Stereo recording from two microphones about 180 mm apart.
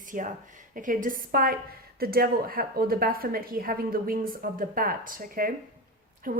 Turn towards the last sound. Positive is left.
turn(degrees=-50)  # may be behind; listen again after turning